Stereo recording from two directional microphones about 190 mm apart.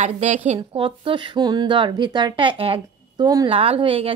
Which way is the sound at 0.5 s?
30° right (ahead or behind).